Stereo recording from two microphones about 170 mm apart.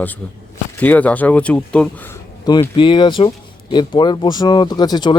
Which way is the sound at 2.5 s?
25° left (ahead or behind).